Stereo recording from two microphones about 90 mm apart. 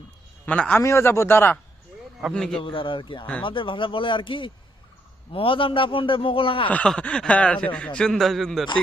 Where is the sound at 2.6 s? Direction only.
70° left (ahead or behind).